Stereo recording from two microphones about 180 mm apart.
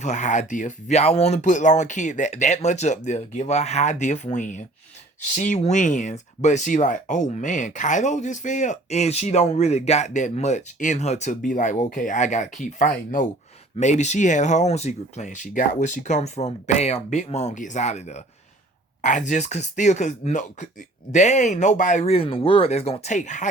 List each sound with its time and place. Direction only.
0.0 s speech: 40° left (ahead or behind)